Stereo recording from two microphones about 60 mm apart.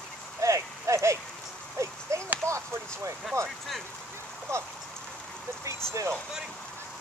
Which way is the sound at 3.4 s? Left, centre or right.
Centre.